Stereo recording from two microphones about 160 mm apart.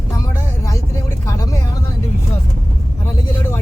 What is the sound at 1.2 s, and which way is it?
Speech, 20° left (ahead or behind).